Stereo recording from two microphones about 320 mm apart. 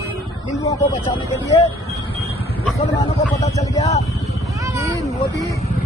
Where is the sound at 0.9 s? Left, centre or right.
Centre.